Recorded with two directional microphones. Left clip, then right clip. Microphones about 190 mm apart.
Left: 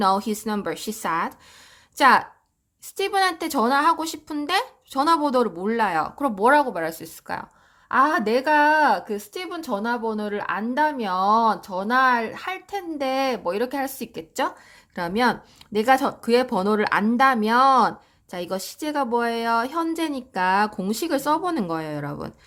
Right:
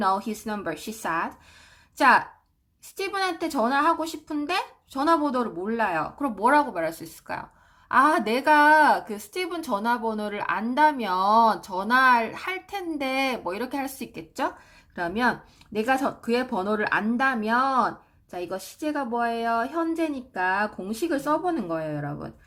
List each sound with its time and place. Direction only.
0.0 s speech: 35° left (ahead or behind)